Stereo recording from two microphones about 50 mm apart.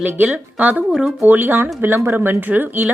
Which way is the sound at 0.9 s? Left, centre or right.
Centre.